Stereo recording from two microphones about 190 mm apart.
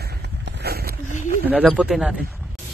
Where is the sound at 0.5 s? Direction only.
55° right (ahead or behind).